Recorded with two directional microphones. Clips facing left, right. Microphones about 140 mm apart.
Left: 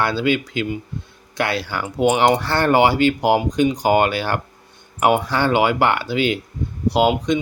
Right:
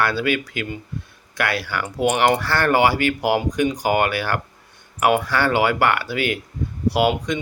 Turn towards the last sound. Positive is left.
turn(degrees=20)  # may be behind; listen again after turning